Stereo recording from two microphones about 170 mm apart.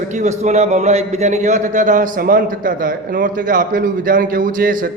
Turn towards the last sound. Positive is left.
turn(degrees=-55)  # may be behind; listen again after turning